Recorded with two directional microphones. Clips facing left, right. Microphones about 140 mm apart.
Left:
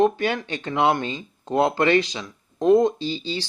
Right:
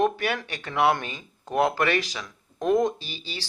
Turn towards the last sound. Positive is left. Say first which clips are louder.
# left 11 dB
turn(degrees=25)  # may be behind; listen again after turning